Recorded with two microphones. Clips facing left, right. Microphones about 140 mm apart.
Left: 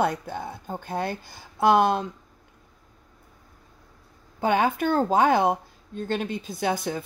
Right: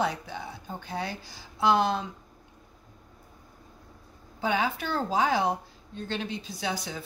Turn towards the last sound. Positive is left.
turn(degrees=55)  # may be behind; listen again after turning